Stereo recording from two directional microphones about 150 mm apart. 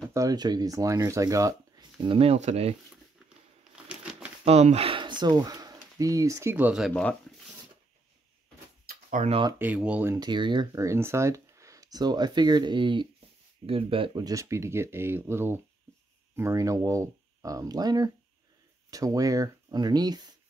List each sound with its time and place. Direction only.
0.1 s speech: 25° right (ahead or behind)
2.0 s speech: 40° right (ahead or behind)
3.9 s crumpling: 5° right (ahead or behind)
4.5 s speech: 45° right (ahead or behind); by 6.9 s 5° right (ahead or behind)
6.9 s speech: 10° left (ahead or behind)
9.2 s speech: 60° right (ahead or behind)
9.6 s speech: 10° right (ahead or behind)
10.1 s speech: 30° right (ahead or behind)